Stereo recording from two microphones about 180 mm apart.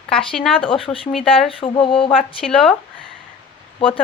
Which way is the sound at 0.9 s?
15° left (ahead or behind).